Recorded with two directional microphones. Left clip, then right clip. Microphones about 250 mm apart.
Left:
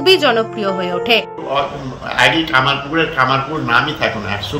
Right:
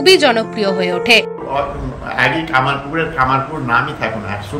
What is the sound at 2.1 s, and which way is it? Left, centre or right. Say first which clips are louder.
A man's voice: left 2 dB; centre.